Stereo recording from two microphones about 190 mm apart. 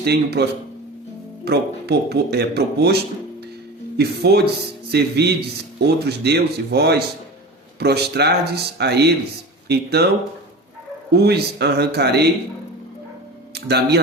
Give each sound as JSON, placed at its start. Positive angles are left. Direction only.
{"t": 0.0, "sound": "a man's voice", "side_deg": -60}
{"t": 1.5, "sound": "a man's voice", "side_deg": -60}
{"t": 11.1, "sound": "a man's voice", "side_deg": -60}
{"t": 13.5, "sound": "speech", "side_deg": -60}